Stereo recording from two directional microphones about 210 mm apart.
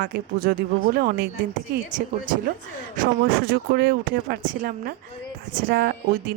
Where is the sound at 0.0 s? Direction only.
45° right (ahead or behind).